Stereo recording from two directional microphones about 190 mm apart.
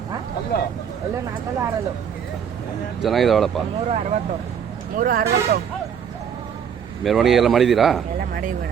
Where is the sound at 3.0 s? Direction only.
Centre (ahead or behind).